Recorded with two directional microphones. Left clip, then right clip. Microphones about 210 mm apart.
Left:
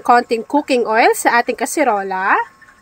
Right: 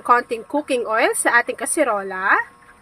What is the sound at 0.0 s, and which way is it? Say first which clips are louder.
A woman's voice: left 4 dB; 25° left (ahead or behind).